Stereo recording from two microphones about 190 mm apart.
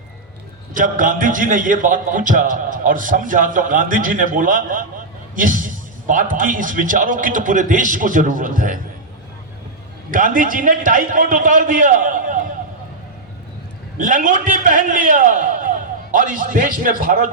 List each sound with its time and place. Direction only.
0.7 s a man's voice: 45° right (ahead or behind)
10.1 s a man's voice: 45° right (ahead or behind)
14.0 s a man's voice: 45° right (ahead or behind)